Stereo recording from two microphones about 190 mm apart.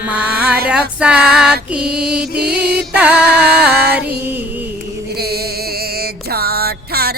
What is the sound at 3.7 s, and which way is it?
Music, 55° right (ahead or behind).